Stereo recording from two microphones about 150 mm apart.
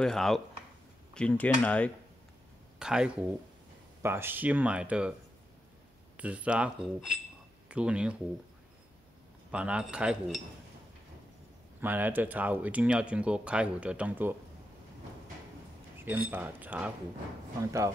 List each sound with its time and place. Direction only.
0.0 s speech: centre (ahead or behind)
2.8 s speech: 5° right (ahead or behind)
4.0 s speech: 15° right (ahead or behind)
6.1 s speech: 10° right (ahead or behind)
9.5 s speech: 5° right (ahead or behind)
11.8 s speech: 10° right (ahead or behind)
16.1 s speech: 15° right (ahead or behind)